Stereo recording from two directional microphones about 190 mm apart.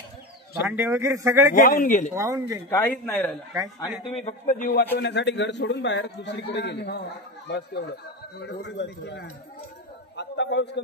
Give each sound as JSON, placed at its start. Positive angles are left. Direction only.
{"t": 0.7, "sound": "speech", "side_deg": -10}
{"t": 1.5, "sound": "a man's voice", "side_deg": 45}
{"t": 2.1, "sound": "speech", "side_deg": -15}
{"t": 2.7, "sound": "speech", "side_deg": 5}
{"t": 4.2, "sound": "a man's voice", "side_deg": 40}
{"t": 4.9, "sound": "a man's voice", "side_deg": 70}